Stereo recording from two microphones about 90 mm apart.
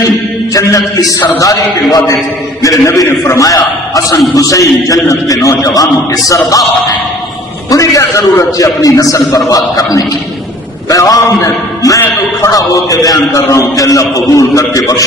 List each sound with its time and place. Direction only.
0.5 s a man's voice: 40° left (ahead or behind)
7.7 s a man's voice: 40° left (ahead or behind)